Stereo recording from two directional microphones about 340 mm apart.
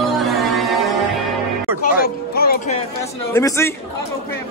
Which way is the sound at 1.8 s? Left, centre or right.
Left.